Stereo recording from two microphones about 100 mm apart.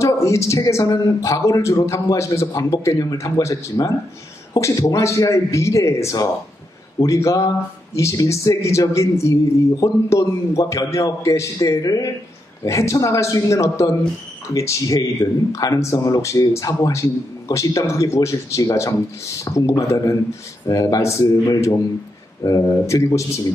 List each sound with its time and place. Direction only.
0.0 s speech: 30° left (ahead or behind)